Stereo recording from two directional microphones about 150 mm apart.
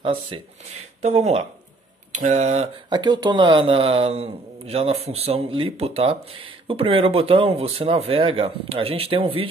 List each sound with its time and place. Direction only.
0.0 s a man's voice: 35° right (ahead or behind)
2.9 s a man's voice: 30° right (ahead or behind)